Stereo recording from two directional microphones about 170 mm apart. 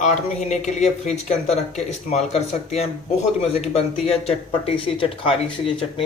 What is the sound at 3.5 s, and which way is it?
Speech, 35° left (ahead or behind).